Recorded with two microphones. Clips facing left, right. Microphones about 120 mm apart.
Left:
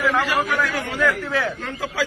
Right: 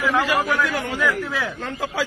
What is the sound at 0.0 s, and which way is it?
A man's voice, centre (ahead or behind).